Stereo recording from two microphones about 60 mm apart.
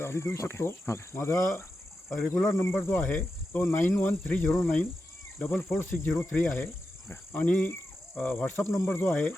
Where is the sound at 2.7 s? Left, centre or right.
Left.